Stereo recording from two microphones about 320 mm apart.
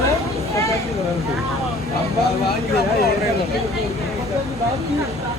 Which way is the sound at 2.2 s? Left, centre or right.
Left.